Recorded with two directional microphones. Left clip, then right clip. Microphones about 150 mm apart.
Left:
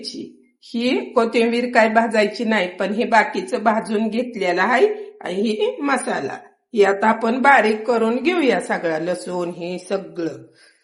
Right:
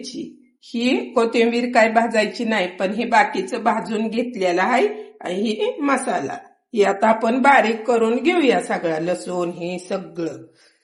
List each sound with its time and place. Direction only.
0.7 s a woman's voice: centre (ahead or behind)